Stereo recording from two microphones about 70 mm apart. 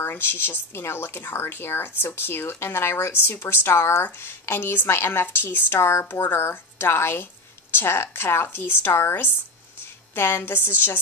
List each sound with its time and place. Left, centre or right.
0.0 s speech: left